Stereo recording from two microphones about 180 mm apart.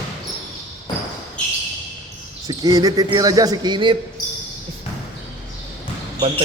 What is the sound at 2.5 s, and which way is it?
A man's voice, 20° right (ahead or behind).